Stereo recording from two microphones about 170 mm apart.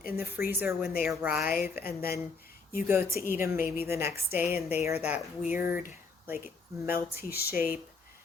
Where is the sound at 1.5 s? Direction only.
60° left (ahead or behind).